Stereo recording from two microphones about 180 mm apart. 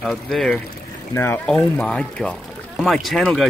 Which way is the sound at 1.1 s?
10° left (ahead or behind).